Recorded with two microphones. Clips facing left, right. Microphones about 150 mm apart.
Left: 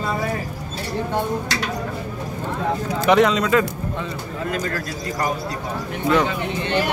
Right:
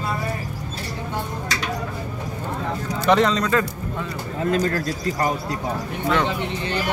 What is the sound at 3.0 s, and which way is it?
Speech, 5° left (ahead or behind).